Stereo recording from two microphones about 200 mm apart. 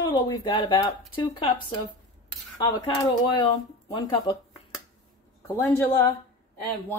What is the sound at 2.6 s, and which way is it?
Speech, 20° left (ahead or behind).